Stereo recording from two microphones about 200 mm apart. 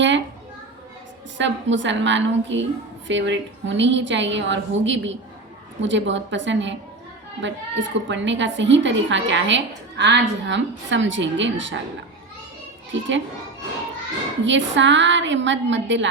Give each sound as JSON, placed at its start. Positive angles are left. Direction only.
{"t": 1.4, "sound": "a woman's voice", "side_deg": -65}
{"t": 12.9, "sound": "a child's voice", "side_deg": -65}
{"t": 14.4, "sound": "a woman's voice", "side_deg": -65}